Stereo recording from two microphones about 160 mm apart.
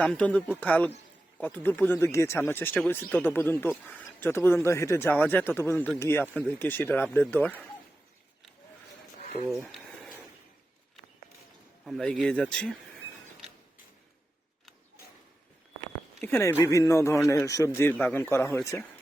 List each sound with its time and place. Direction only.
0.0 s speech: 5° left (ahead or behind)
9.6 s a sound: centre (ahead or behind)
11.9 s speech: 5° left (ahead or behind)
16.2 s a man's voice: 15° left (ahead or behind)
17.9 s a man's voice: 5° left (ahead or behind)